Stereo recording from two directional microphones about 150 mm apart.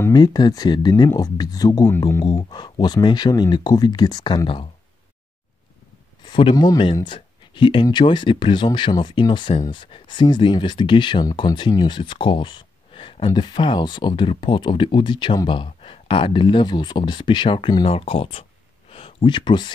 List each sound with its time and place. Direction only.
0.1 s speech: 25° left (ahead or behind)
2.2 s speech: 30° left (ahead or behind)
6.2 s a man's voice: 30° left (ahead or behind)